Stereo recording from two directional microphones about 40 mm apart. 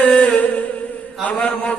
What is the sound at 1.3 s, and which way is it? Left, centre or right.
Mantra, left.